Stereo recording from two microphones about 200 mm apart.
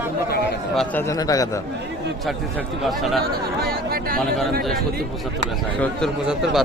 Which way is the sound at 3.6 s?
50° right (ahead or behind).